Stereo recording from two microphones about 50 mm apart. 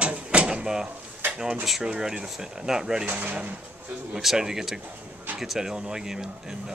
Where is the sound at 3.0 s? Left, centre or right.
Right.